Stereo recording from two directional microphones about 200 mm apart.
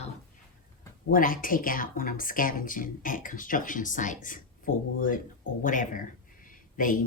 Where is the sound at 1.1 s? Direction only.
45° left (ahead or behind).